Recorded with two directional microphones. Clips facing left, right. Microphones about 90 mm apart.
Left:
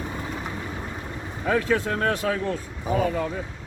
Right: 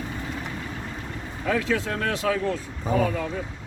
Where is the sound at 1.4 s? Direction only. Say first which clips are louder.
Left 2 dB; 35° left (ahead or behind).